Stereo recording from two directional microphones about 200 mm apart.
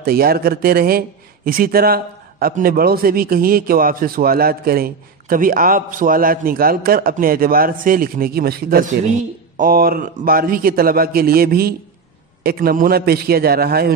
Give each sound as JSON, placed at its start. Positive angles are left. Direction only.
{"t": 0.0, "sound": "a man's voice", "side_deg": -50}